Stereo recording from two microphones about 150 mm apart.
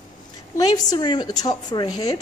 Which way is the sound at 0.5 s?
25° left (ahead or behind).